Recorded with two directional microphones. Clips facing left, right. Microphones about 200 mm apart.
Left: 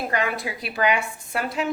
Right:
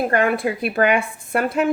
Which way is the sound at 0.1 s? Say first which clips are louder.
Right 7 dB; 55° right (ahead or behind).